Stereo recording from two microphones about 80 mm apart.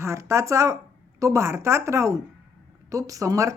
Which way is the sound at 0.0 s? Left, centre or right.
Right.